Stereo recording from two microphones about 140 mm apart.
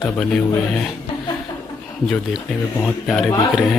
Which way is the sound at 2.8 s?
Centre (ahead or behind).